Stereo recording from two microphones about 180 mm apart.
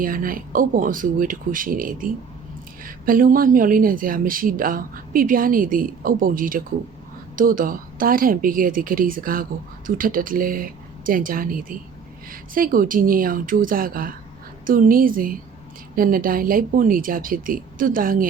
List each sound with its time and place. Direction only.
0.0 s speech: 50° right (ahead or behind)